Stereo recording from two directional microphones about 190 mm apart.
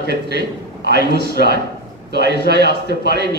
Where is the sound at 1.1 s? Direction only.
60° right (ahead or behind).